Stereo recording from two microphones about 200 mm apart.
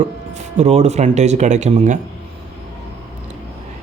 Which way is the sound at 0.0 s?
35° right (ahead or behind).